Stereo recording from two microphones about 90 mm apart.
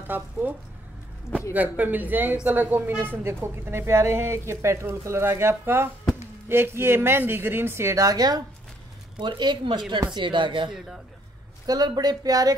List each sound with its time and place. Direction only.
0.1 s a woman's voice: 20° right (ahead or behind); by 8.4 s 45° right (ahead or behind)
9.2 s speech: 60° right (ahead or behind)
11.6 s speech: 50° right (ahead or behind)